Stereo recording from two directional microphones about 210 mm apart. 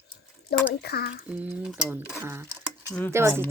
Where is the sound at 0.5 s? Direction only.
50° left (ahead or behind).